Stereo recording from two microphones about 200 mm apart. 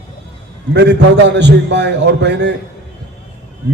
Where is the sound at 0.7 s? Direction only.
60° right (ahead or behind).